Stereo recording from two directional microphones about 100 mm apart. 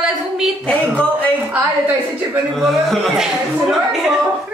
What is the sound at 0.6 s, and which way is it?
Speech, 10° left (ahead or behind).